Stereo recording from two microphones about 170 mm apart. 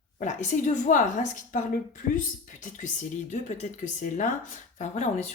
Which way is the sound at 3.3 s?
45° left (ahead or behind).